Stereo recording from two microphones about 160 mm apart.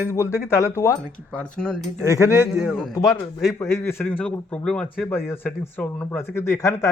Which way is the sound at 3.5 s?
15° left (ahead or behind).